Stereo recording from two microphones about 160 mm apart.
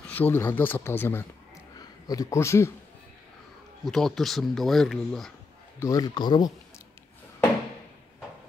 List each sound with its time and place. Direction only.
0.0 s speech: 10° left (ahead or behind)
3.8 s speech: centre (ahead or behind)
5.8 s speech: 25° left (ahead or behind)